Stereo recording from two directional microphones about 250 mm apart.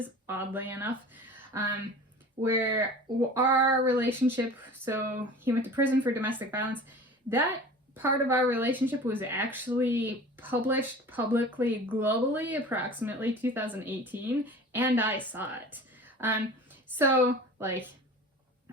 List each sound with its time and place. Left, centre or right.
0.0 s a woman's voice: centre